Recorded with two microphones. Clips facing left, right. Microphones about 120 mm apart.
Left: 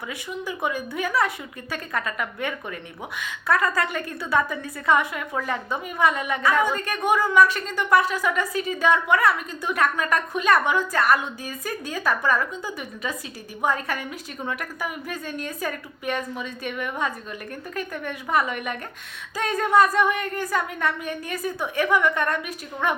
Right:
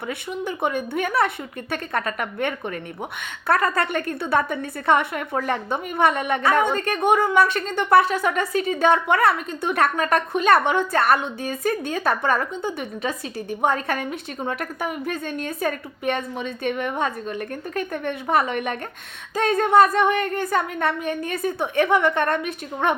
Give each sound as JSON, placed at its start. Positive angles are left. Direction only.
{"t": 0.1, "sound": "a woman's voice", "side_deg": -55}
{"t": 3.9, "sound": "speech", "side_deg": -60}
{"t": 4.2, "sound": "a woman's voice", "side_deg": -30}
{"t": 4.6, "sound": "speech", "side_deg": -60}
{"t": 5.3, "sound": "a woman's voice", "side_deg": -35}
{"t": 6.0, "sound": "speech", "side_deg": -60}
{"t": 6.6, "sound": "a woman's voice", "side_deg": -30}